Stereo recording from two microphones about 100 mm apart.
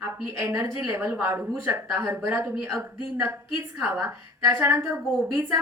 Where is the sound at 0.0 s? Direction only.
30° right (ahead or behind).